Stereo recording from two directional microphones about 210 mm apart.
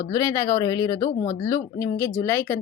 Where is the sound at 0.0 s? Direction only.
15° left (ahead or behind).